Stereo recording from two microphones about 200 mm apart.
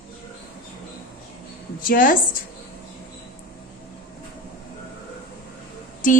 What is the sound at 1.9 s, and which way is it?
Speech, 45° left (ahead or behind).